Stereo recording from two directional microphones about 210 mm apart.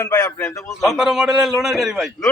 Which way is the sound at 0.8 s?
Centre (ahead or behind).